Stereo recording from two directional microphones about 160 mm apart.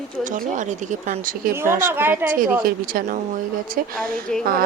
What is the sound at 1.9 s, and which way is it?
Speech, 10° right (ahead or behind).